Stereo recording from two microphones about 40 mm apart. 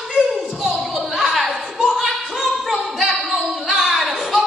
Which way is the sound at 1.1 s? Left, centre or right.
Centre.